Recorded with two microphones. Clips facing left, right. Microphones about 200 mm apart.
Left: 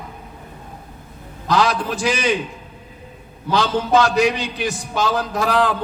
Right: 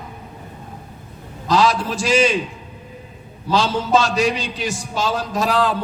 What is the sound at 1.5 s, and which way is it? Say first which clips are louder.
Speech: right 1 dB; 55° left (ahead or behind).